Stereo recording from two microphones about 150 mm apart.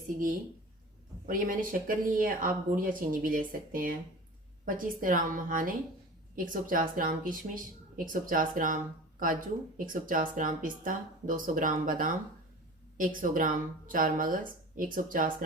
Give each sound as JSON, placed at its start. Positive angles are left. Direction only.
{"t": 1.3, "sound": "a woman's voice", "side_deg": -65}
{"t": 13.2, "sound": "a woman's voice", "side_deg": -65}